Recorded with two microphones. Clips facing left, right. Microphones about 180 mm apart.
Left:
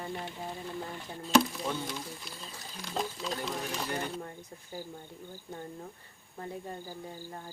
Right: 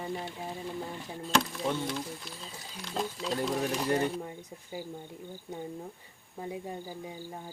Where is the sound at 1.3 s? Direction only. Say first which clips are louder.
Left 3 dB; 5° left (ahead or behind).